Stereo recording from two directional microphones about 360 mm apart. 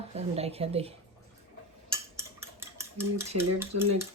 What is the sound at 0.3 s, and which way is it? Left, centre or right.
Speech, centre.